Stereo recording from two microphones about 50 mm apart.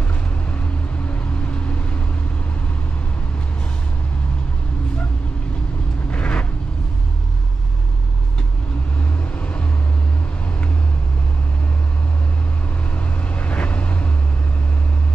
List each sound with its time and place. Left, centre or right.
1.0 s vehicle: left
6.0 s vehicle: left
9.4 s vehicle: left
12.9 s vehicle: left